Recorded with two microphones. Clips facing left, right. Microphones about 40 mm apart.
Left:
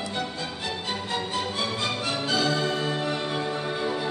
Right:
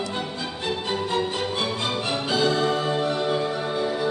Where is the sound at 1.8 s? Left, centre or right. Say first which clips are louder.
Right 2 dB; right.